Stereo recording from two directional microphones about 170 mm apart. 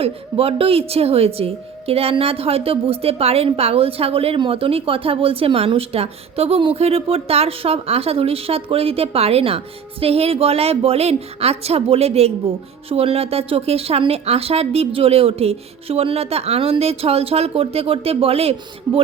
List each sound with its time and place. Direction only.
0.0 s a woman's voice: 35° right (ahead or behind)
18.9 s a man's voice: 25° right (ahead or behind)